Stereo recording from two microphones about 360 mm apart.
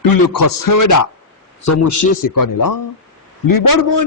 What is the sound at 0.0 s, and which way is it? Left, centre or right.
A man's voice, left.